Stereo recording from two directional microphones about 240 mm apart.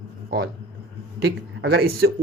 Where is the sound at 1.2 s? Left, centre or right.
Right.